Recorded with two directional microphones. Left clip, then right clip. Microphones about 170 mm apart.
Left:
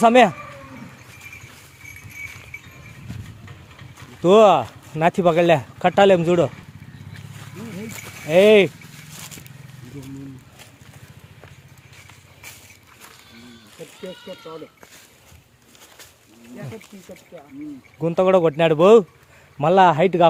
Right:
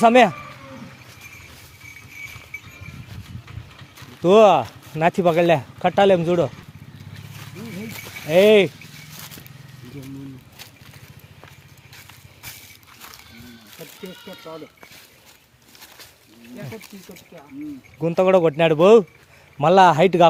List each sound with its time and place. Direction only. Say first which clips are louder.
0.0 s speech: even; 10° left (ahead or behind)
3.9 s speech: even; 10° left (ahead or behind)
8.3 s speech: left 1 dB; 5° left (ahead or behind)
9.1 s scrape: left 2 dB; 20° left (ahead or behind)
14.3 s speech: left 2 dB; 35° right (ahead or behind)
18.0 s speech: even; centre (ahead or behind)